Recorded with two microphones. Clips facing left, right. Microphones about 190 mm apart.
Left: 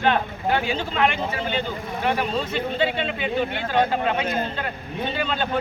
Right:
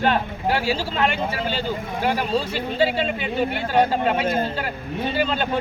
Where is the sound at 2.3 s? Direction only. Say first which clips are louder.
Right 2 dB; 30° right (ahead or behind).